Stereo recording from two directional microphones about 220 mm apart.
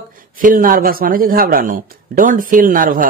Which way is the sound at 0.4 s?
40° right (ahead or behind).